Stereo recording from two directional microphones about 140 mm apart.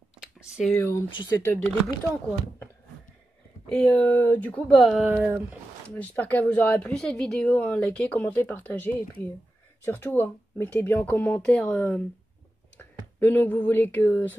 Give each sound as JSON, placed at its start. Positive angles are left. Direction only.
{"t": 0.2, "sound": "a sound", "side_deg": -5}
{"t": 0.7, "sound": "speech", "side_deg": 20}
{"t": 3.6, "sound": "speech", "side_deg": 5}
{"t": 4.7, "sound": "speech", "side_deg": 0}
{"t": 5.1, "sound": "speech", "side_deg": -10}
{"t": 5.9, "sound": "speech", "side_deg": 10}